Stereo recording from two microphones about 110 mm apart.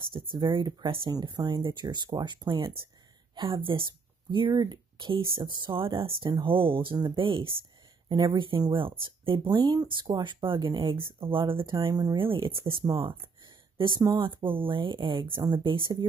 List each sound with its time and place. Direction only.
0.1 s speech: 50° right (ahead or behind)
11.7 s speech: 35° right (ahead or behind)
12.2 s speech: 50° right (ahead or behind)